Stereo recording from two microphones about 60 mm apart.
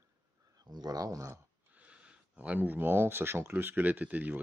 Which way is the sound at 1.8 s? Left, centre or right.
Right.